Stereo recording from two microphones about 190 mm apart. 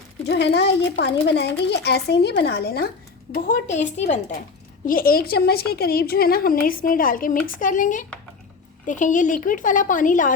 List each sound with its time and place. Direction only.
0.3 s a woman's voice: 65° left (ahead or behind); by 4.4 s 35° left (ahead or behind)
4.9 s a woman's voice: 50° left (ahead or behind)